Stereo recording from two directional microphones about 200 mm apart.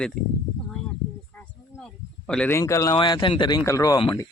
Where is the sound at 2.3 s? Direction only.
10° left (ahead or behind).